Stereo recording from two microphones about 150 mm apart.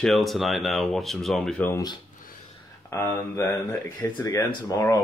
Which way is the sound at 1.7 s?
25° left (ahead or behind).